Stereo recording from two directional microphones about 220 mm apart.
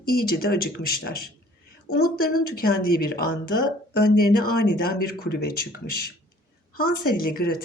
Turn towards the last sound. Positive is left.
turn(degrees=45)  # may be behind; listen again after turning